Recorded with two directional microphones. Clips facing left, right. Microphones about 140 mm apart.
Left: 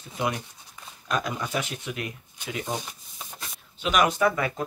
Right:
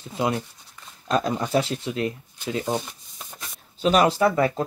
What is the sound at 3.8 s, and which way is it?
Speech, 35° right (ahead or behind).